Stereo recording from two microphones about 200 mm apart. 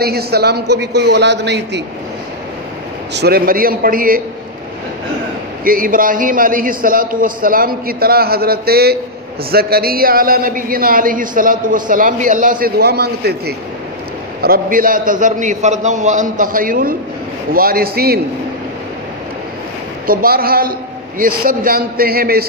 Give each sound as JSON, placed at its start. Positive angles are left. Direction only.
{"t": 0.0, "sound": "a man's voice", "side_deg": -50}
{"t": 3.2, "sound": "speech", "side_deg": -50}
{"t": 5.6, "sound": "a man's voice", "side_deg": -45}
{"t": 20.1, "sound": "speech", "side_deg": -45}